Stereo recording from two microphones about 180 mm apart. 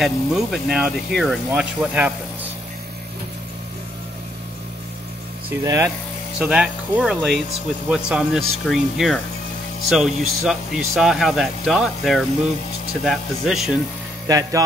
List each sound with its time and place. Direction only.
0.0 s speech: 5° right (ahead or behind)
5.5 s speech: 15° right (ahead or behind)
6.3 s speech: 5° right (ahead or behind)
14.2 s speech: 20° right (ahead or behind)